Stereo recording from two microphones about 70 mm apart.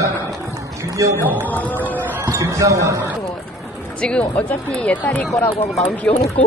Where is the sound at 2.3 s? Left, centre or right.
Right.